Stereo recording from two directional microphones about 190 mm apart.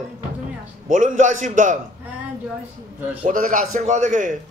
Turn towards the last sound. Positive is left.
turn(degrees=-40)  # may be behind; listen again after turning